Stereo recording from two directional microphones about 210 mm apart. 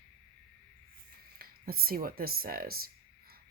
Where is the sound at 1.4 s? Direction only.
45° right (ahead or behind).